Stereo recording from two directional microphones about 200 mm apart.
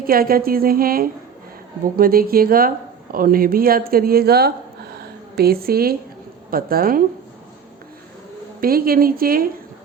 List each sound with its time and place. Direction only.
0.1 s a woman's voice: 45° right (ahead or behind)
4.9 s a sound: 50° right (ahead or behind)
6.5 s a woman's voice: 45° right (ahead or behind)
8.6 s a woman's voice: 45° right (ahead or behind)